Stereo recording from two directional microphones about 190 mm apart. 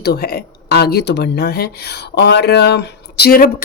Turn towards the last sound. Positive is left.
turn(degrees=50)  # may be behind; listen again after turning